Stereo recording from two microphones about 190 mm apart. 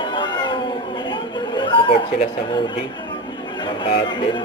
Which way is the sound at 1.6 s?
25° left (ahead or behind).